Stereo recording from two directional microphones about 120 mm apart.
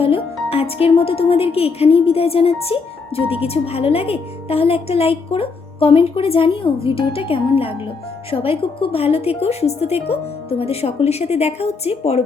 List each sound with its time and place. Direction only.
0.0 s a woman's voice: 55° left (ahead or behind)